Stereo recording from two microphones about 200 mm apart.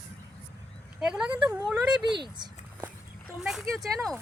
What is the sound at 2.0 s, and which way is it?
Speech, 20° right (ahead or behind).